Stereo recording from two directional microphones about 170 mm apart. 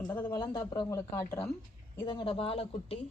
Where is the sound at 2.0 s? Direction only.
30° left (ahead or behind).